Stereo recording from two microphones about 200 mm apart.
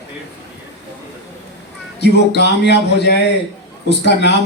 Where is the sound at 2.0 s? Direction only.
60° left (ahead or behind).